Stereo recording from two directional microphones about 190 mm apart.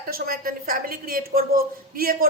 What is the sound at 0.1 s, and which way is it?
A woman's voice, 50° right (ahead or behind).